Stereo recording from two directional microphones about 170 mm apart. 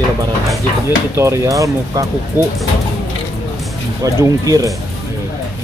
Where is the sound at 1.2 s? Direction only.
20° right (ahead or behind).